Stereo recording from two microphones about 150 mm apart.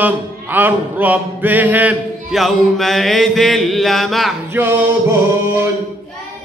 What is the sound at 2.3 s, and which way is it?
Mantra, centre (ahead or behind).